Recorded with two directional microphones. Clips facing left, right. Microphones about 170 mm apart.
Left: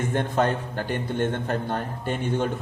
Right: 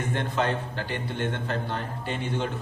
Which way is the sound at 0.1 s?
50° left (ahead or behind).